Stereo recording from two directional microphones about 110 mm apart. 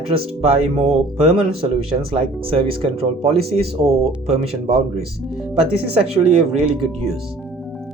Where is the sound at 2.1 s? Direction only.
55° right (ahead or behind); by 4.8 s 75° right (ahead or behind).